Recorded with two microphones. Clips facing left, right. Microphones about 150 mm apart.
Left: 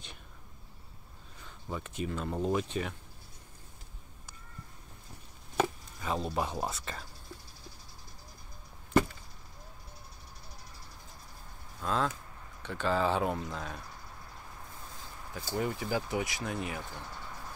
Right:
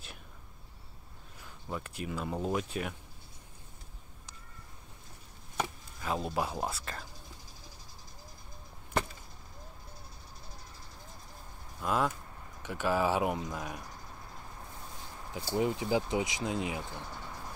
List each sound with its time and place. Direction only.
1.4 s speech: 5° right (ahead or behind)
5.9 s speech: centre (ahead or behind)
11.8 s speech: 10° right (ahead or behind)
15.5 s speech: 20° right (ahead or behind)